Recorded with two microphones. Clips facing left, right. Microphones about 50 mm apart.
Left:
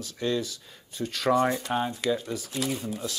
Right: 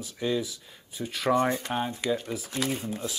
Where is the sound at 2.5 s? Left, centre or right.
Right.